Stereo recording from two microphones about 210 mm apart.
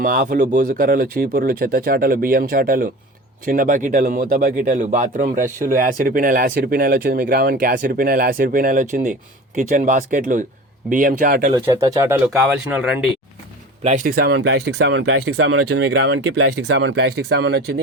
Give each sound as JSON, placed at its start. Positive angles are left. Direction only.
{"t": 0.0, "sound": "speech", "side_deg": -40}
{"t": 11.5, "sound": "speech", "side_deg": -15}
{"t": 12.3, "sound": "speech", "side_deg": -5}
{"t": 13.8, "sound": "speech", "side_deg": -40}
{"t": 14.3, "sound": "speech", "side_deg": -60}
{"t": 15.8, "sound": "speech", "side_deg": -50}